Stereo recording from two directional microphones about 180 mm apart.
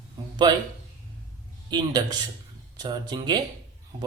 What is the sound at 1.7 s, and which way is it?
Speech, 25° right (ahead or behind).